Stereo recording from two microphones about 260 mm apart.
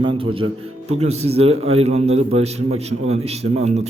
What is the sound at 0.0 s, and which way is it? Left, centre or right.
A man's voice, centre.